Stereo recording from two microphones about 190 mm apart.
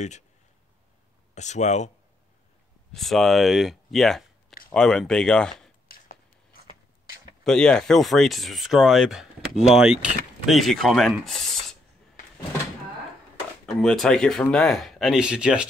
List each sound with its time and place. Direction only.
1.3 s speech: 35° left (ahead or behind)
2.9 s speech: centre (ahead or behind)
5.9 s a sound: 50° left (ahead or behind)
7.4 s speech: 5° left (ahead or behind)
13.7 s speech: centre (ahead or behind)